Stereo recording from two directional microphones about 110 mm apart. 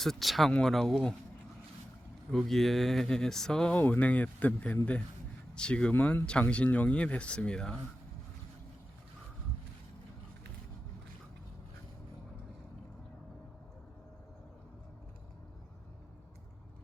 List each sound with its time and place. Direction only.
0.0 s speech: centre (ahead or behind)
2.3 s speech: centre (ahead or behind)